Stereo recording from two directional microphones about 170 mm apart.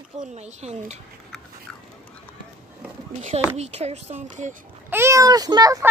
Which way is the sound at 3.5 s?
40° right (ahead or behind).